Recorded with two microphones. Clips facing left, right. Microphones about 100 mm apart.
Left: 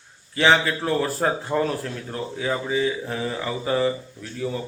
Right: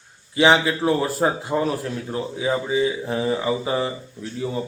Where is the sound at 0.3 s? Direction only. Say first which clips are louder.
Right 2 dB; 15° right (ahead or behind).